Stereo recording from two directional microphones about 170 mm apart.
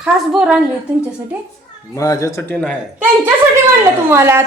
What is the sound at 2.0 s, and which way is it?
Speech, 20° left (ahead or behind).